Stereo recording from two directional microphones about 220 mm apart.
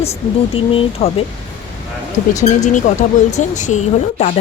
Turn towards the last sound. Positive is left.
turn(degrees=30)  # may be behind; listen again after turning